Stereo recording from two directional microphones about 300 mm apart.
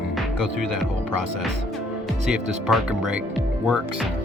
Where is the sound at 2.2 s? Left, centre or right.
Centre.